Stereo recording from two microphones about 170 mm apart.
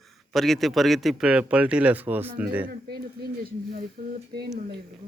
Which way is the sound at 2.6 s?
65° right (ahead or behind).